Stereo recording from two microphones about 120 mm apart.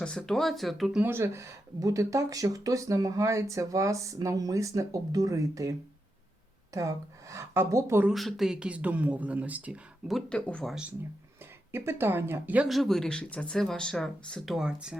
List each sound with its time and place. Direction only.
0.0 s speech: 5° left (ahead or behind)
1.0 s speech: 20° right (ahead or behind)
6.7 s speech: 25° right (ahead or behind)
8.1 s speech: centre (ahead or behind)
10.1 s speech: 5° left (ahead or behind)
11.7 s speech: 20° right (ahead or behind)
12.6 s speech: centre (ahead or behind)